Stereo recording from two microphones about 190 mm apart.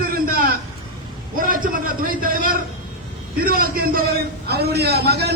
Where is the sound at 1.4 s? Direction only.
45° right (ahead or behind).